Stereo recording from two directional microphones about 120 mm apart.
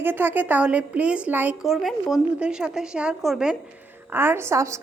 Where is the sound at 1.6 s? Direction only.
Centre (ahead or behind).